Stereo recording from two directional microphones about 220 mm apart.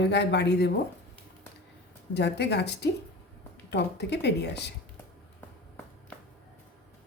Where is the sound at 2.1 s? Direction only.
50° left (ahead or behind).